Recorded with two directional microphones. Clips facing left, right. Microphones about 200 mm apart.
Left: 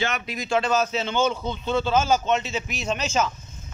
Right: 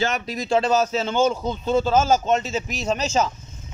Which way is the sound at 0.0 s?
40° right (ahead or behind).